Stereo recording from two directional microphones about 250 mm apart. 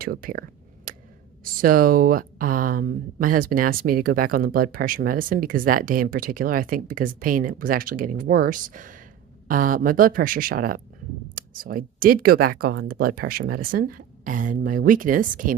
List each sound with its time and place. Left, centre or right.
0.0 s speech: right
0.9 s a sound: right
1.5 s speech: right